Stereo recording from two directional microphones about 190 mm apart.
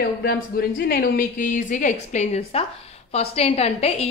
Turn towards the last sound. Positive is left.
turn(degrees=35)  # may be behind; listen again after turning